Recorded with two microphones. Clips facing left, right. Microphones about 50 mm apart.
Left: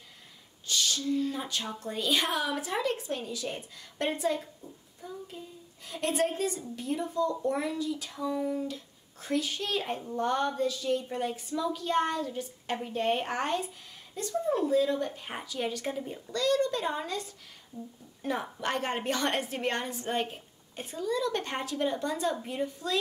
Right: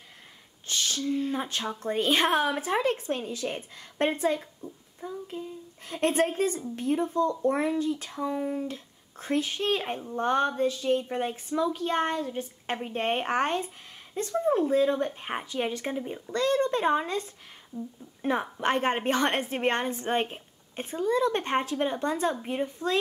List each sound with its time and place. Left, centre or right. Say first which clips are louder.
0.7 s a woman's voice: right 1 dB; right
17.7 s speech: right 6 dB; left
18.2 s a woman's voice: right 5 dB; right